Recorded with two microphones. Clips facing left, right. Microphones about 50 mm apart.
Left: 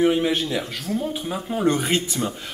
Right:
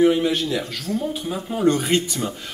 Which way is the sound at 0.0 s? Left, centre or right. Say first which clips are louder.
Right 2 dB; centre.